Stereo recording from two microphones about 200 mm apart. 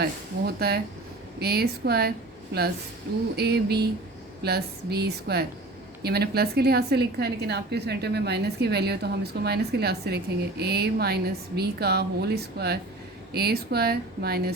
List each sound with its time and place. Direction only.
0.0 s a woman's voice: 50° right (ahead or behind)